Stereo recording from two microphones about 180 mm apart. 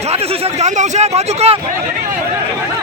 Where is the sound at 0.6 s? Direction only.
40° right (ahead or behind).